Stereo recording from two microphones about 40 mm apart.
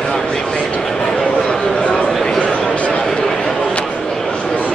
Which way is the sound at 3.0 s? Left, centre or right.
Centre.